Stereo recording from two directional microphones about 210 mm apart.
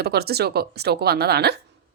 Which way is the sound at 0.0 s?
50° right (ahead or behind).